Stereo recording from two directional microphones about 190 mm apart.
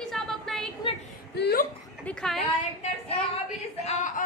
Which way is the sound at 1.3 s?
55° left (ahead or behind).